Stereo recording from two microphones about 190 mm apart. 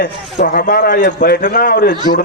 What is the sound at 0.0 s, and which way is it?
A man's voice, 50° left (ahead or behind).